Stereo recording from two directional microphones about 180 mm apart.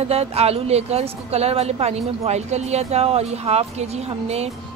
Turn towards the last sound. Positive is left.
turn(degrees=-35)  # may be behind; listen again after turning